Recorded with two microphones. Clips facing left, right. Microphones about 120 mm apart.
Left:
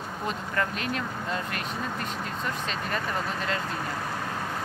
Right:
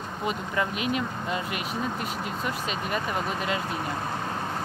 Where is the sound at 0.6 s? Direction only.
10° right (ahead or behind).